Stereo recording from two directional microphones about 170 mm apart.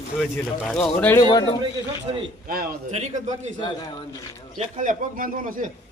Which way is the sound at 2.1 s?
35° right (ahead or behind).